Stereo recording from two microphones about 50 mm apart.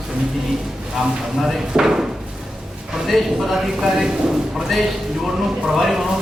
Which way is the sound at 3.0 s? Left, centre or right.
Centre.